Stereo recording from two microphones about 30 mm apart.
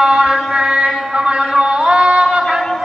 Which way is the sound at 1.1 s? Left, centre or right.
Right.